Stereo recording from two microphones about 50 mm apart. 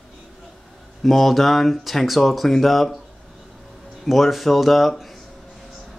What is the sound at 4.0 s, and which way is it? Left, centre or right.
Speech, centre.